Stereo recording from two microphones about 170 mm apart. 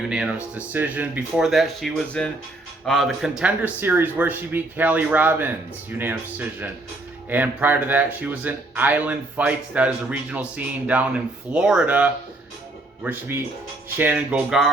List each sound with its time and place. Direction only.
0.5 s speech: 10° right (ahead or behind)